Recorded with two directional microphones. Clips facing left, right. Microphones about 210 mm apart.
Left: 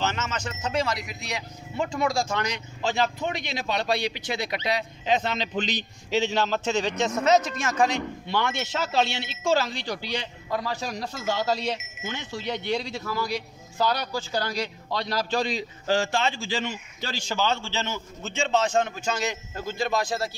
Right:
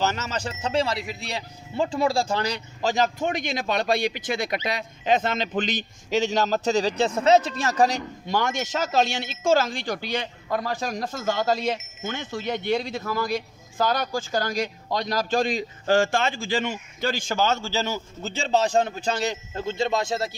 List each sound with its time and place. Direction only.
0.0 s a man's voice: 40° right (ahead or behind)